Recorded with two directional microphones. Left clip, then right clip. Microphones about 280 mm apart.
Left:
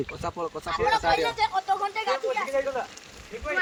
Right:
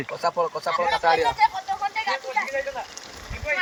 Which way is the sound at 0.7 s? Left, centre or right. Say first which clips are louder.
Right 1 dB; centre.